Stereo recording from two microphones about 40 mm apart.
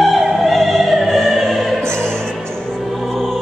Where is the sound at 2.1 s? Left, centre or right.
Centre.